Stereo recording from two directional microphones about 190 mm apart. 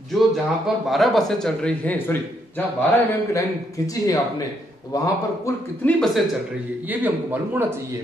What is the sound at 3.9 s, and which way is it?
Speech, 20° left (ahead or behind).